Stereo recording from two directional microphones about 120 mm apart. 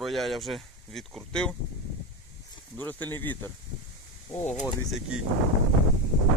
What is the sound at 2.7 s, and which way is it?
Speech, 15° left (ahead or behind).